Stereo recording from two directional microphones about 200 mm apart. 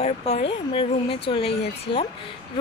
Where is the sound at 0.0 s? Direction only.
30° left (ahead or behind).